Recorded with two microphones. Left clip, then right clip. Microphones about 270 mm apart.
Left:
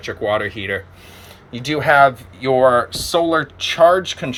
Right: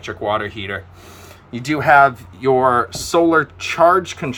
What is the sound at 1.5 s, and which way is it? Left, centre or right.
Speech, centre.